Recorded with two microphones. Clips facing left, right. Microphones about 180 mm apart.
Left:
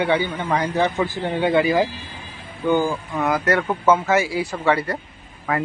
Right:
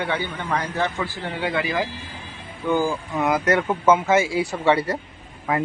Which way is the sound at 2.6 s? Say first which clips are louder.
Left 2 dB; centre (ahead or behind).